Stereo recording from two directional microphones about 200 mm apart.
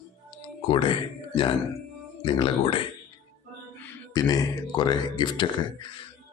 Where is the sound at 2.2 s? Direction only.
25° left (ahead or behind).